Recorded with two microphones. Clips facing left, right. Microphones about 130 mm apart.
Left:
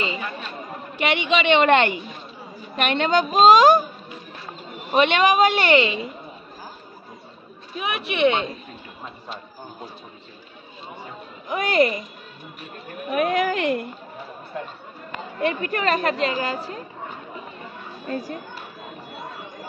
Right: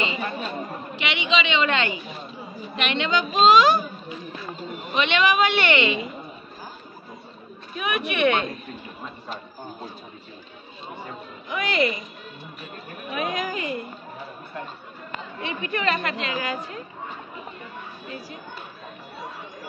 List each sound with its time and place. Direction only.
0.9 s a woman's voice: 50° left (ahead or behind)
4.9 s speech: 45° left (ahead or behind)
7.7 s speech: 25° left (ahead or behind)
11.4 s a woman's voice: 45° left (ahead or behind)
13.1 s a woman's voice: 55° left (ahead or behind)
15.4 s speech: 45° left (ahead or behind)
18.0 s speech: 45° left (ahead or behind)